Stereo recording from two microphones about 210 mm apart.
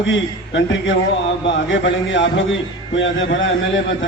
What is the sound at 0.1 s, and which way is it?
A man's voice, 60° left (ahead or behind).